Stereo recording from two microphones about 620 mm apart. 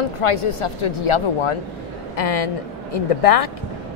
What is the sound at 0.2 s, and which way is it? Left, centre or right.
Speech, left.